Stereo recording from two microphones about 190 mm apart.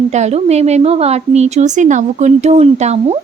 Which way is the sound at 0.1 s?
35° right (ahead or behind).